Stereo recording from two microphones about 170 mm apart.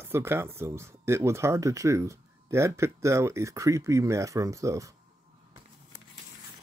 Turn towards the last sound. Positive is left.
turn(degrees=-20)  # may be behind; listen again after turning